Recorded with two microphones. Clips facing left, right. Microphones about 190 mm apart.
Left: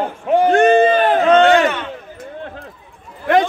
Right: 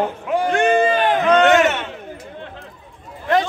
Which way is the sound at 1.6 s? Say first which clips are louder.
Left 1 dB; 25° right (ahead or behind).